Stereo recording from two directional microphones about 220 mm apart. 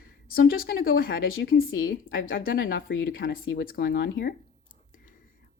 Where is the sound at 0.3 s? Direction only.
40° left (ahead or behind).